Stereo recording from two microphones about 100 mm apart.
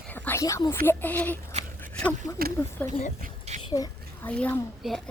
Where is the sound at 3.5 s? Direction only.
90° right.